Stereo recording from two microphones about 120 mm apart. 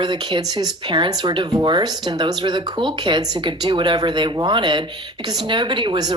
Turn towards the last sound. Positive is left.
turn(degrees=-40)  # may be behind; listen again after turning